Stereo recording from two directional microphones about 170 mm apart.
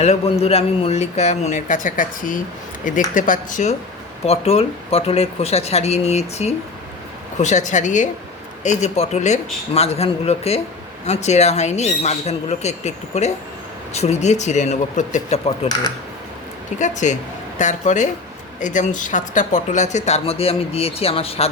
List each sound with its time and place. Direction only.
0.0 s a man's voice: 40° left (ahead or behind)
4.3 s a man's voice: 35° left (ahead or behind)
16.7 s speech: 45° left (ahead or behind)